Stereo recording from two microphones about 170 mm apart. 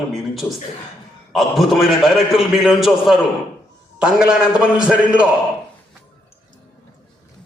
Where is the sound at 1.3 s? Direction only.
Centre (ahead or behind).